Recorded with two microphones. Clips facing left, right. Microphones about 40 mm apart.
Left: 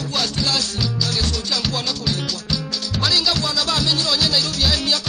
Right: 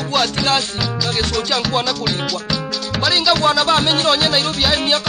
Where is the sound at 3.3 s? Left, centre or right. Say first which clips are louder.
Right 7 dB; right.